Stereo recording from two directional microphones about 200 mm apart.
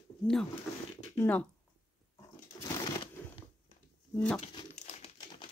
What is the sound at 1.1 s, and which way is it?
Speech, 10° left (ahead or behind).